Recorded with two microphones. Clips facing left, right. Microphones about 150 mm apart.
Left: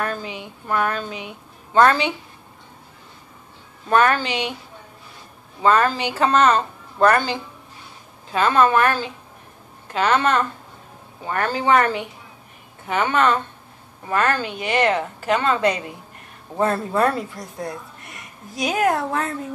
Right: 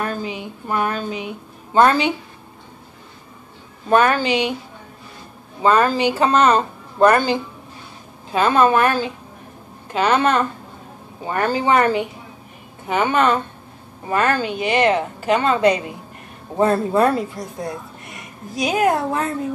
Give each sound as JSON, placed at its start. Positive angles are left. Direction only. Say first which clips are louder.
{"t": 0.0, "sound": "a sound", "louder": "right 2 dB", "side_deg": -15}
{"t": 0.4, "sound": "a woman's voice", "louder": "left 2 dB", "side_deg": -15}
{"t": 3.9, "sound": "a woman's voice", "louder": "right 2 dB", "side_deg": -10}
{"t": 5.6, "sound": "a woman's voice", "louder": "right 2 dB", "side_deg": -15}
{"t": 18.6, "sound": "a woman's voice", "louder": "right 2 dB", "side_deg": -10}